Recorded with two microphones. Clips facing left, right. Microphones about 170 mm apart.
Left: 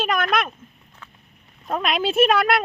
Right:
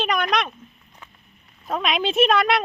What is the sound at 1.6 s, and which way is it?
Speech, centre (ahead or behind).